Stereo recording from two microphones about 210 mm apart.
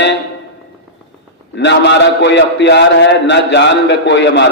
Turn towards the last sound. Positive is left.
turn(degrees=55)  # may be behind; listen again after turning